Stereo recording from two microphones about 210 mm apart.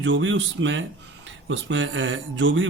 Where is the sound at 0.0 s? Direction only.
65° right (ahead or behind).